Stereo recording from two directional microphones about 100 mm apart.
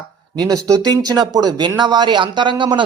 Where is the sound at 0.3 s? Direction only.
40° right (ahead or behind).